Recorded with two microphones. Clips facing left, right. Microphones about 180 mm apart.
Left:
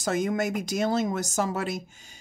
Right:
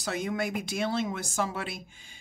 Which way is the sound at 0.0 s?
45° left (ahead or behind).